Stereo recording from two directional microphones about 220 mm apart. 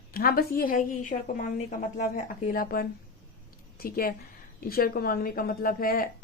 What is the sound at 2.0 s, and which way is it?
A woman's voice, 35° left (ahead or behind).